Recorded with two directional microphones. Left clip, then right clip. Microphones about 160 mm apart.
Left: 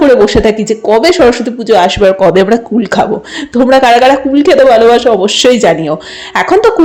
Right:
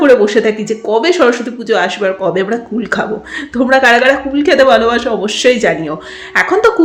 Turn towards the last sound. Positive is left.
turn(degrees=35)  # may be behind; listen again after turning